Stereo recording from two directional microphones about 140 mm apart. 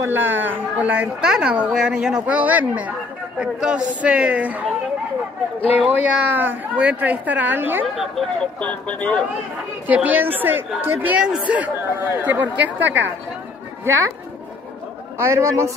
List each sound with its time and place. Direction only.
0.0 s a woman's voice: 15° right (ahead or behind)
5.7 s a woman's voice: 10° right (ahead or behind)
7.9 s speech: centre (ahead or behind)
9.8 s a woman's voice: 10° right (ahead or behind)
15.1 s a man's voice: 20° right (ahead or behind)